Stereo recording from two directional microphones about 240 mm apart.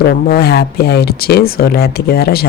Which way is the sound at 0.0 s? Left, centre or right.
Left.